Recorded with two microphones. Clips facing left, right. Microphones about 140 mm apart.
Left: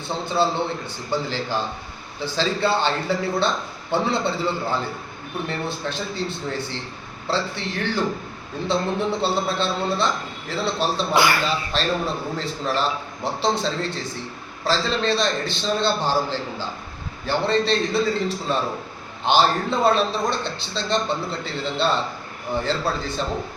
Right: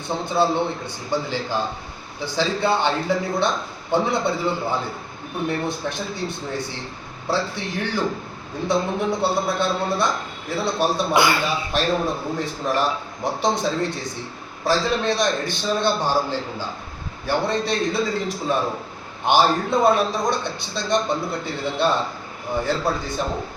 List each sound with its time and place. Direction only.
0.1 s a man's voice: 15° right (ahead or behind)